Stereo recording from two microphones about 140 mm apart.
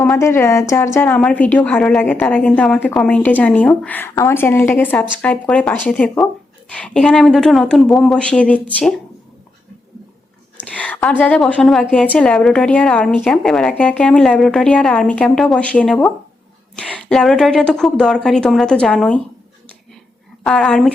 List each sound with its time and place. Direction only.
0.2 s a woman's voice: 20° left (ahead or behind)
10.6 s a woman's voice: 10° left (ahead or behind)
20.4 s speech: 5° left (ahead or behind)